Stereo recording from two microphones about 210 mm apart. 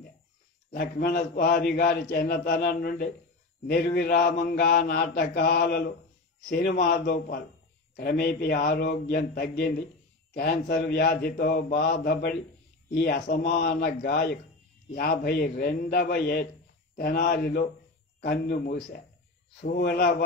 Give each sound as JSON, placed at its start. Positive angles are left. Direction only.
{"t": 0.7, "sound": "a man's voice", "side_deg": 45}